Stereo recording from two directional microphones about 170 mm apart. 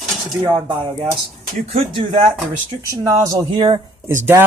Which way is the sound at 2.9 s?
20° right (ahead or behind).